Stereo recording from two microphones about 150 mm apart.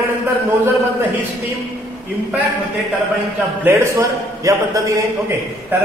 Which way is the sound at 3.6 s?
15° right (ahead or behind).